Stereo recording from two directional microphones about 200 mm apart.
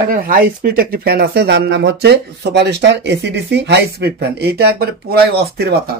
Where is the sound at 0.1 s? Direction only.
45° right (ahead or behind).